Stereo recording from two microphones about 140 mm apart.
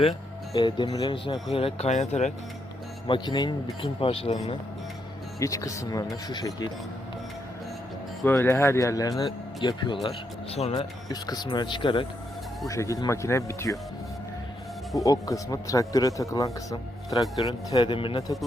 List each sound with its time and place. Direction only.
0.5 s speech: 35° left (ahead or behind); by 2.3 s 55° left (ahead or behind)
3.1 s speech: 30° left (ahead or behind)
5.4 s speech: 25° left (ahead or behind)
8.2 s speech: 15° left (ahead or behind); by 10.8 s 45° left (ahead or behind)
11.1 s speech: 30° left (ahead or behind)
12.6 s speech: 20° left (ahead or behind)
14.9 s speech: 25° left (ahead or behind)
17.9 s speech: 40° left (ahead or behind)